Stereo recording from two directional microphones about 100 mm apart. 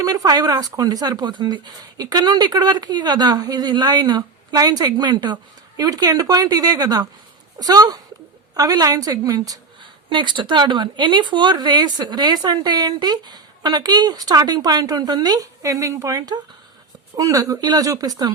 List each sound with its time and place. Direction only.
0.0 s speech: 40° right (ahead or behind)
10.1 s speech: 55° right (ahead or behind)